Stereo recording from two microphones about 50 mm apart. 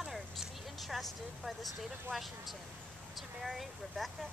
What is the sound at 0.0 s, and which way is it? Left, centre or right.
Vehicle, centre.